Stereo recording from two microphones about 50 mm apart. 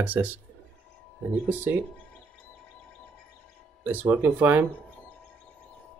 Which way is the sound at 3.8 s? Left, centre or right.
Right.